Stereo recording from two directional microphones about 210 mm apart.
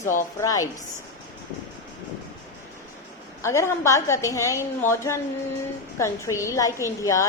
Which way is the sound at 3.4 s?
15° left (ahead or behind).